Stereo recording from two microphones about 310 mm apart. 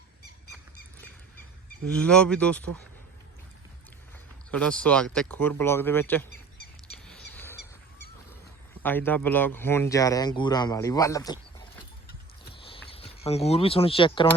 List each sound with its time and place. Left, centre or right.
1.9 s speech: centre
4.5 s speech: centre
6.8 s bird: centre
8.8 s speech: centre
12.5 s a sound: centre